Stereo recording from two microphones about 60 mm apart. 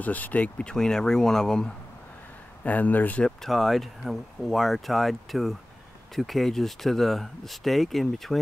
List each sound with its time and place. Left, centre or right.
0.0 s speech: left; by 1.7 s centre
2.6 s speech: left
3.3 s speech: centre